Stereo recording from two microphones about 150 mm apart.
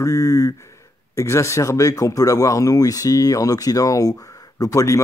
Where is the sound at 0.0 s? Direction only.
20° left (ahead or behind).